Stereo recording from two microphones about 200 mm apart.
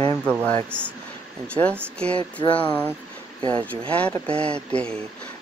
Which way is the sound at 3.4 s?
5° left (ahead or behind).